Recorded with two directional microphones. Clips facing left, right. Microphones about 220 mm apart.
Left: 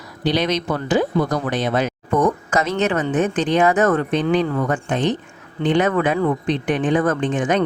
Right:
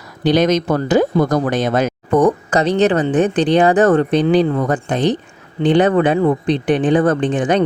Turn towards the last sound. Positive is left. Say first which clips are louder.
# right 4 dB
turn(degrees=-30)  # may be behind; listen again after turning